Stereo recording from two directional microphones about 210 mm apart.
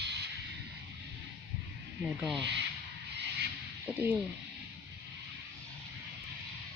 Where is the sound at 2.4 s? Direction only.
60° right (ahead or behind).